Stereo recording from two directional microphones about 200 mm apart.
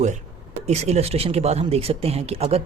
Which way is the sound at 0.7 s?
35° right (ahead or behind).